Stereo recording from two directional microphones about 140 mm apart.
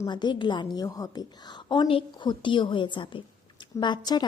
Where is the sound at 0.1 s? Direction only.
30° left (ahead or behind).